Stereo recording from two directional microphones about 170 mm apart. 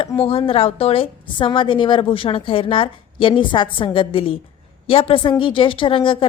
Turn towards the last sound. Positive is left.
turn(degrees=30)  # may be behind; listen again after turning